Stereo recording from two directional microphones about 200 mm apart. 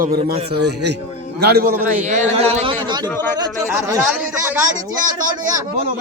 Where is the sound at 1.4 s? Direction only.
50° right (ahead or behind).